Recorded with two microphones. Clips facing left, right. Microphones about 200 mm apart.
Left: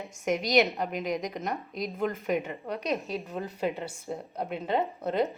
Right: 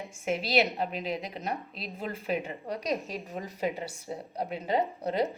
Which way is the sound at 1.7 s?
30° right (ahead or behind).